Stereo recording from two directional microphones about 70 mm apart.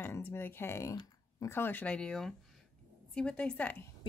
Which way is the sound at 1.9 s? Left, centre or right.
Centre.